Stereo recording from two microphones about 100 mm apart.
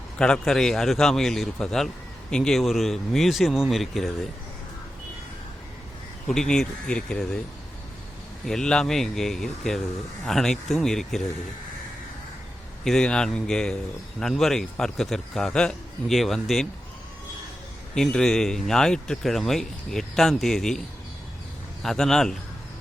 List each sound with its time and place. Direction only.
0.2 s speech: 5° left (ahead or behind)
6.2 s speech: 5° left (ahead or behind)
8.4 s speech: 5° left (ahead or behind)
12.8 s speech: 5° left (ahead or behind)
17.9 s speech: 5° left (ahead or behind)
21.8 s speech: 5° left (ahead or behind)